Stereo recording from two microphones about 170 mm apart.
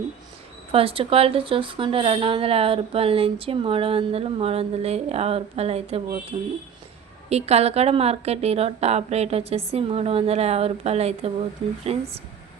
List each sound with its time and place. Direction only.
0.7 s speech: 35° right (ahead or behind)